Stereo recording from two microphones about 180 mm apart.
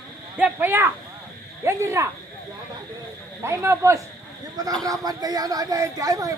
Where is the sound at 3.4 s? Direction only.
15° right (ahead or behind).